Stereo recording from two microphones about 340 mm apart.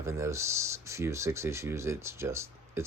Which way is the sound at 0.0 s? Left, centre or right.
Centre.